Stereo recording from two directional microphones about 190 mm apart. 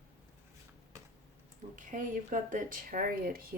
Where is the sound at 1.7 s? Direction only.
40° right (ahead or behind).